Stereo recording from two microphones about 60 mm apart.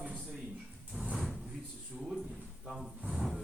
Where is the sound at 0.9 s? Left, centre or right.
Centre.